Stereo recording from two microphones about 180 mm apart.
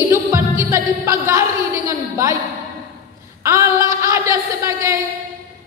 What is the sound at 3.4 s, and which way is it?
A woman's voice, 15° right (ahead or behind).